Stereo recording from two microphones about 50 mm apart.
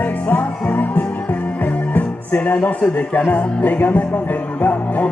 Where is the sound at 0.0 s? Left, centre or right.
Left.